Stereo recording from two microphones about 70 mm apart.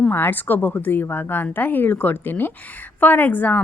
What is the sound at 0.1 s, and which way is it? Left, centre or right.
A woman's voice, left.